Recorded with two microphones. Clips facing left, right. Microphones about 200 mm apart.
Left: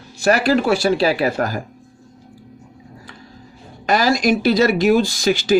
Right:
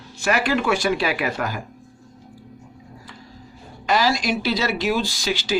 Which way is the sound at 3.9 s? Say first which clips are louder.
Left 5 dB; 45° left (ahead or behind).